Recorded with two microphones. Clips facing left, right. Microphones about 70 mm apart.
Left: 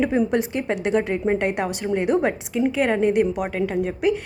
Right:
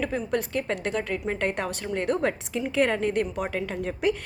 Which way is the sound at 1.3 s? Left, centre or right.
Centre.